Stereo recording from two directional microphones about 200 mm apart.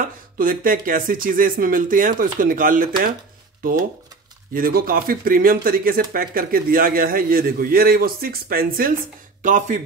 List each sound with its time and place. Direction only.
0.4 s speech: 45° right (ahead or behind)
4.6 s speech: 45° right (ahead or behind)